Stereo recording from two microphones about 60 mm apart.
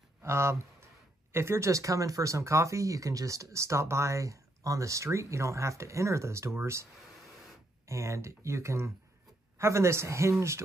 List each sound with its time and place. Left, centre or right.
0.2 s a sound: right
1.3 s speech: right
7.9 s speech: right